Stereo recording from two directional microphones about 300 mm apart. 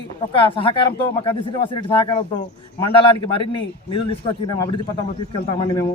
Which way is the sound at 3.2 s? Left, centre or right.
Centre.